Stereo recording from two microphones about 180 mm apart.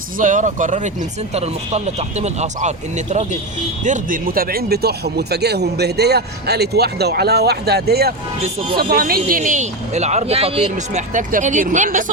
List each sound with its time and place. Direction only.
0.2 s speech: 45° right (ahead or behind)
11.1 s speech: 45° right (ahead or behind)